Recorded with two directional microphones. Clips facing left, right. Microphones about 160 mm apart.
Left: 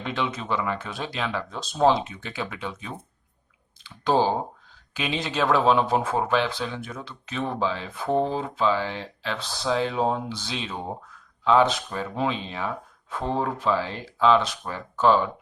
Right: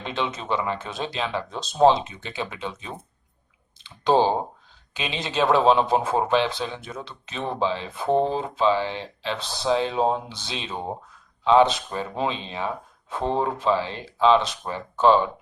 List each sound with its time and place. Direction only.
0.0 s speech: 25° right (ahead or behind)